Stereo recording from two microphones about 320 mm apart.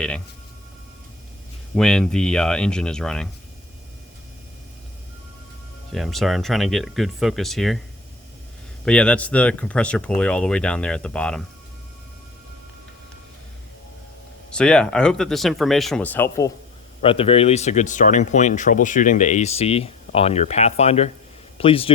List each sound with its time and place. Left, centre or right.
1.7 s speech: centre
5.9 s speech: centre
8.8 s speech: centre
14.5 s speech: centre
17.0 s speech: centre